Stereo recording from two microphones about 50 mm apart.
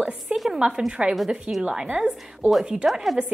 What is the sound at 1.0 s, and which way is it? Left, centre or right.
A woman's voice, right.